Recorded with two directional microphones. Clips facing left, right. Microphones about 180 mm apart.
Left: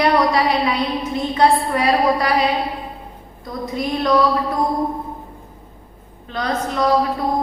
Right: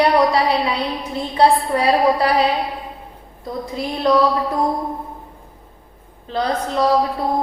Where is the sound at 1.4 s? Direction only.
30° right (ahead or behind).